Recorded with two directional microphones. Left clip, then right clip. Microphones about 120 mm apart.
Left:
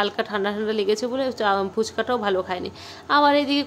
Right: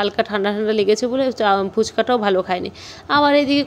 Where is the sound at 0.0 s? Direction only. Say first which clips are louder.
Right 4 dB; 30° right (ahead or behind).